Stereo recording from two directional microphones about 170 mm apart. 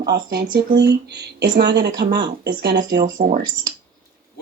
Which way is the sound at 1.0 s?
85° right.